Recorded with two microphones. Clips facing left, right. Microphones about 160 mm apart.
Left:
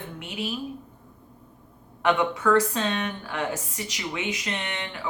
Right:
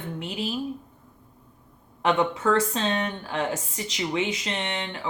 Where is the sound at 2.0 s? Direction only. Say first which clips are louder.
Even; 25° right (ahead or behind).